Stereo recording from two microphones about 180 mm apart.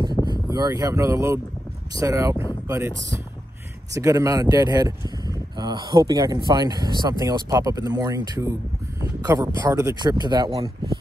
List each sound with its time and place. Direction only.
0.2 s speech: 25° right (ahead or behind)